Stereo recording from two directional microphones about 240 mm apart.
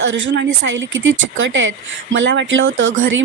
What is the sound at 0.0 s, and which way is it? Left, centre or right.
Speech, right.